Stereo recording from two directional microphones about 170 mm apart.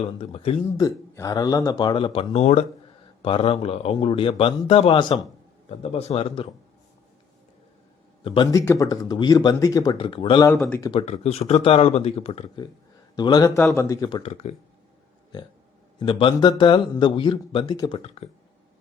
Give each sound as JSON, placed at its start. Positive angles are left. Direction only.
{"t": 0.2, "sound": "speech", "side_deg": 35}
{"t": 0.8, "sound": "speech", "side_deg": 20}
{"t": 8.2, "sound": "speech", "side_deg": 30}
{"t": 8.5, "sound": "speech", "side_deg": 20}
{"t": 13.1, "sound": "speech", "side_deg": 25}
{"t": 14.2, "sound": "speech", "side_deg": 35}
{"t": 16.0, "sound": "speech", "side_deg": 30}